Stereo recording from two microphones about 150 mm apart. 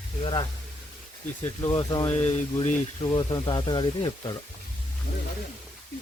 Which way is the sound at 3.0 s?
30° left (ahead or behind).